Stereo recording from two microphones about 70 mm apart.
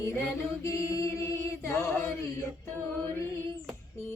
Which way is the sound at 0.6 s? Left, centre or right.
Left.